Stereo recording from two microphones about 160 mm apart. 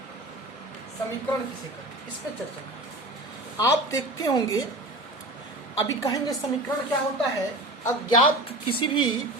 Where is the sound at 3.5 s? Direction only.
20° left (ahead or behind).